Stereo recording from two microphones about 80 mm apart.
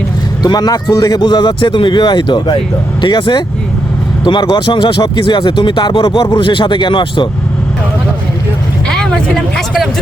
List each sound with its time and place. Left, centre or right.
0.4 s speech: left
1.2 s speech: left
6.3 s speech: left
8.9 s vehicle: centre